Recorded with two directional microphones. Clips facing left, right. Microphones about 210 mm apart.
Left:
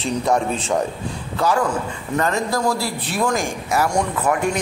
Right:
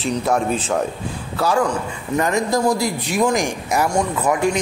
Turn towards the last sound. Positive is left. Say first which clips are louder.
# right 1 dB
turn(degrees=-10)  # may be behind; listen again after turning